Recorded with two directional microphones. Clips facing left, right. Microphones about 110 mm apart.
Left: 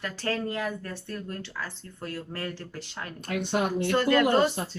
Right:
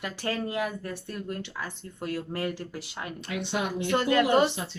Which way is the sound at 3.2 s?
45° left (ahead or behind).